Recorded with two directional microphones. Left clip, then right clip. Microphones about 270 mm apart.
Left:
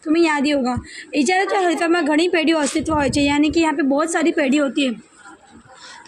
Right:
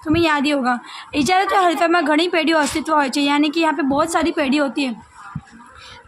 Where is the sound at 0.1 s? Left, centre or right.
Centre.